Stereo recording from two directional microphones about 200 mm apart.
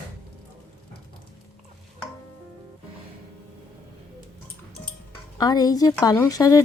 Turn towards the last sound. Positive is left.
turn(degrees=15)  # may be behind; listen again after turning